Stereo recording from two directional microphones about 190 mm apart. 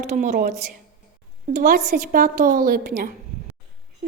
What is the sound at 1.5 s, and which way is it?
A woman's voice, 50° right (ahead or behind).